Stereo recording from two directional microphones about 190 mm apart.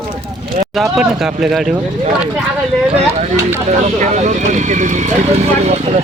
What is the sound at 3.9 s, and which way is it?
Speech, 40° right (ahead or behind).